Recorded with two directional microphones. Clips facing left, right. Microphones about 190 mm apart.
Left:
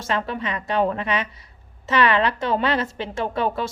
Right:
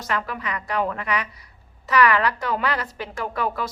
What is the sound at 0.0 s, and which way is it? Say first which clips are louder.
A woman's voice: left 3 dB; 25° left (ahead or behind).